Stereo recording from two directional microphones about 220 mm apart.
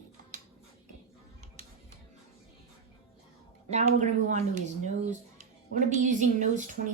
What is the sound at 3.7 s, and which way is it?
Speech, 30° right (ahead or behind).